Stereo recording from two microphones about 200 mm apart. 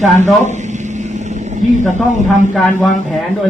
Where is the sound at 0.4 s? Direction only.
35° right (ahead or behind).